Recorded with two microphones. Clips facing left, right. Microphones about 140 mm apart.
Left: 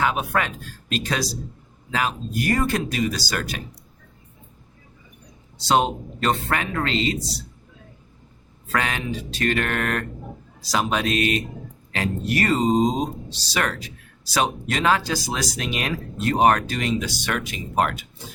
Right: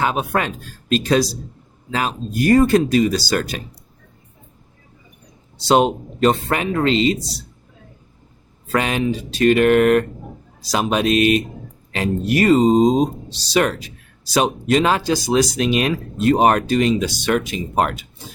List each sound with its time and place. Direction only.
0.0 s speech: 30° right (ahead or behind)
5.6 s speech: 15° right (ahead or behind)
8.7 s speech: 20° right (ahead or behind)